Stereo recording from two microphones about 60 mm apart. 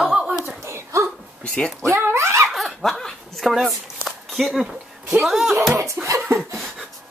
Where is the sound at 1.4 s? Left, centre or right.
Centre.